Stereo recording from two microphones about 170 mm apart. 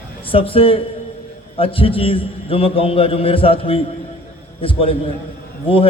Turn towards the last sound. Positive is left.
turn(degrees=35)  # may be behind; listen again after turning